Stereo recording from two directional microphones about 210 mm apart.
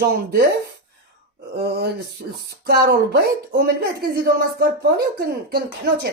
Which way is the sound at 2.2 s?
45° right (ahead or behind).